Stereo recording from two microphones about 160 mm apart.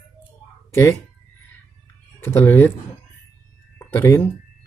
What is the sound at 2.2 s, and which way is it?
Speech, 15° left (ahead or behind).